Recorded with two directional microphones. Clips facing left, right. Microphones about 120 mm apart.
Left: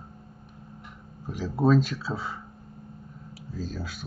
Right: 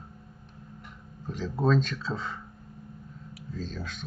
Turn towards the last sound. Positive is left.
turn(degrees=5)  # may be behind; listen again after turning